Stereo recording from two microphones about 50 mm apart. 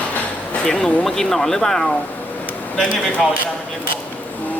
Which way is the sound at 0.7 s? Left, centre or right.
Centre.